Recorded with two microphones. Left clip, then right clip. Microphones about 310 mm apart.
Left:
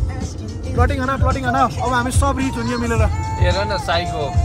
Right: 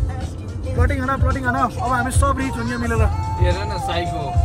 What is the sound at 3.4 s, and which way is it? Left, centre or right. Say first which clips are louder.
Speech: left 4 dB; centre.